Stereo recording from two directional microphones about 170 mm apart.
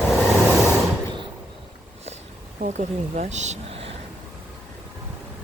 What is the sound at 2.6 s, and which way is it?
Speech, 40° right (ahead or behind).